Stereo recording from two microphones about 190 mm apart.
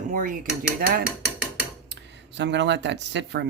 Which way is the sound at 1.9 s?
65° right (ahead or behind).